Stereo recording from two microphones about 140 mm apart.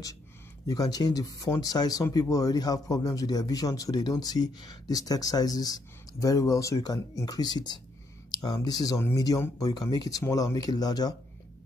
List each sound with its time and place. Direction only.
0.7 s speech: 25° left (ahead or behind)
8.3 s a sound: 30° left (ahead or behind)
8.5 s speech: 25° left (ahead or behind)